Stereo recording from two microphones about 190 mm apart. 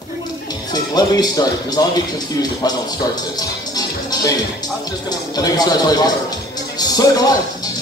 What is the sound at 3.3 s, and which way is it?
Music, 20° left (ahead or behind).